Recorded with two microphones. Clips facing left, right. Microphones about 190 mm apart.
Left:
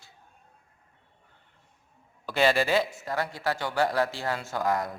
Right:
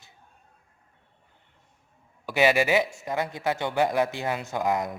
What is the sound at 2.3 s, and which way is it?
Speech, 15° right (ahead or behind).